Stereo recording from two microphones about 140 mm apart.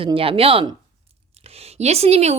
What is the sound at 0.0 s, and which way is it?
Speech, 40° right (ahead or behind).